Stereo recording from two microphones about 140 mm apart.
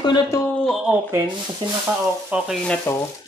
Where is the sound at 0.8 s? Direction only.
10° right (ahead or behind).